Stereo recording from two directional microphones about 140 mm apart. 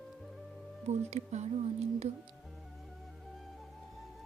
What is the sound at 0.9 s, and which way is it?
Speech, 55° right (ahead or behind).